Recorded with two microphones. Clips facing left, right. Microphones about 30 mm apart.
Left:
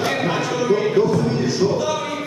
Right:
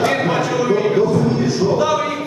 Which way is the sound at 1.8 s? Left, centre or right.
Centre.